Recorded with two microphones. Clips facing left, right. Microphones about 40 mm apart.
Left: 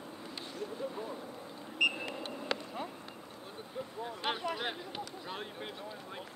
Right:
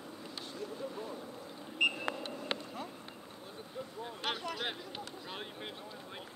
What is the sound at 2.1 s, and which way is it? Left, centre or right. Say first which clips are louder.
Vehicle: left 1 dB; left.